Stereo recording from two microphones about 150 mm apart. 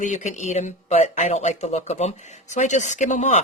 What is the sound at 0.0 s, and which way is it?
Speech, 55° left (ahead or behind).